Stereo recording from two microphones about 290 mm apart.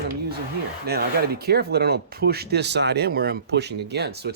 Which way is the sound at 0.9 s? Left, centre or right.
Right.